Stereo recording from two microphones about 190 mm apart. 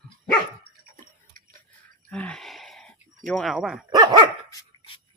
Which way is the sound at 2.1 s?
5° left (ahead or behind).